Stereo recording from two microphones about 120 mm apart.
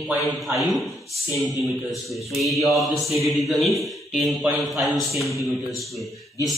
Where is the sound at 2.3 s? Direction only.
Centre (ahead or behind).